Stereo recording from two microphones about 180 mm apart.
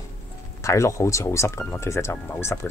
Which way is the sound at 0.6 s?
15° left (ahead or behind).